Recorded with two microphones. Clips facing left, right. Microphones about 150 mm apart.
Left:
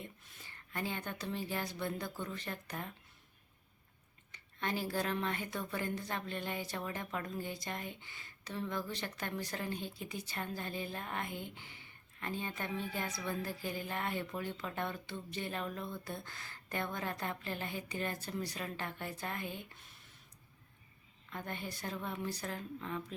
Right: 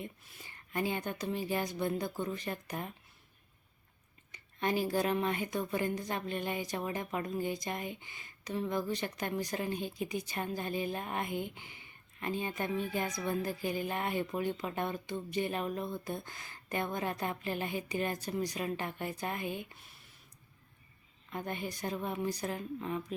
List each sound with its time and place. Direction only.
0.0 s a woman's voice: 15° right (ahead or behind)
4.3 s a woman's voice: 15° right (ahead or behind)
21.2 s a woman's voice: 15° right (ahead or behind)